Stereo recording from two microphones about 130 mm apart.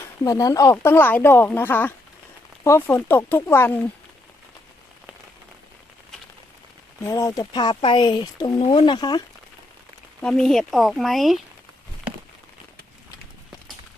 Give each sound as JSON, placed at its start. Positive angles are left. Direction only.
{"t": 0.3, "sound": "speech", "side_deg": 25}
{"t": 7.1, "sound": "speech", "side_deg": 25}
{"t": 8.6, "sound": "speech", "side_deg": 45}
{"t": 10.2, "sound": "speech", "side_deg": 5}